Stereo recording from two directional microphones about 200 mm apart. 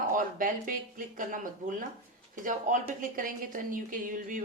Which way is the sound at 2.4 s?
40° right (ahead or behind).